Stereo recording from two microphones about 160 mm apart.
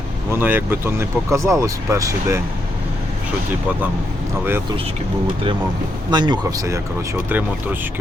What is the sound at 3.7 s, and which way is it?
Speech, 10° right (ahead or behind).